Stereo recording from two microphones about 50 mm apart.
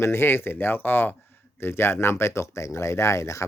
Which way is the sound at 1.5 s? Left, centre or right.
Left.